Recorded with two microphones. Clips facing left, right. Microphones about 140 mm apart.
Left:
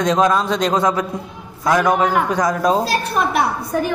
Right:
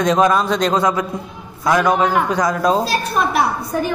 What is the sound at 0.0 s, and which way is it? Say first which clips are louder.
Speech: right 1 dB; 10° right (ahead or behind).